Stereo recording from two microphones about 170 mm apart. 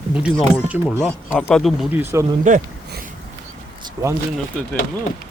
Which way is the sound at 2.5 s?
50° right (ahead or behind).